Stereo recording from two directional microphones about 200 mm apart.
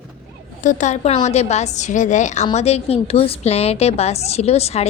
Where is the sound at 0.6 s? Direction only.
40° left (ahead or behind).